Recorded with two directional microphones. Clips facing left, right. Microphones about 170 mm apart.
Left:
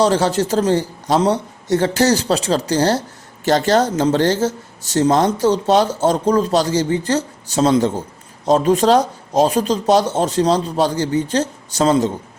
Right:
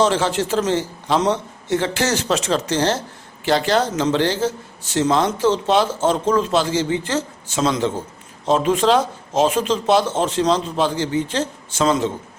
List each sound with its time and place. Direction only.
0.0 s a man's voice: 40° left (ahead or behind)